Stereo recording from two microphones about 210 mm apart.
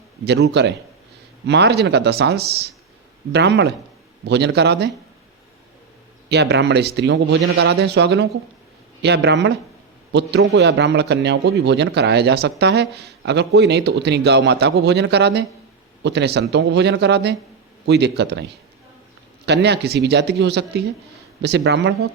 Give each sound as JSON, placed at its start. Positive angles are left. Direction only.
{"t": 0.3, "sound": "a man's voice", "side_deg": -55}
{"t": 6.2, "sound": "a man's voice", "side_deg": -55}
{"t": 19.5, "sound": "a man's voice", "side_deg": -55}